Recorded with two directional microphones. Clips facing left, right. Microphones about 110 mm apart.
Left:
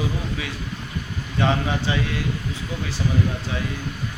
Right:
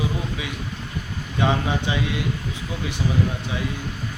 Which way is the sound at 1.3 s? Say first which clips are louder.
Even; 15° right (ahead or behind).